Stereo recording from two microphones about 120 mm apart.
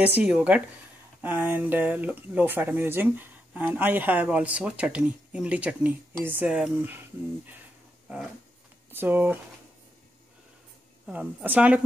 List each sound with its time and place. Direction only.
0.0 s speech: 10° right (ahead or behind)
8.9 s speech: 15° right (ahead or behind)
11.1 s speech: 15° right (ahead or behind)